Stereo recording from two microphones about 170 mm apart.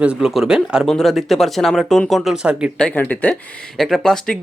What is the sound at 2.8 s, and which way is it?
Speech, 5° left (ahead or behind).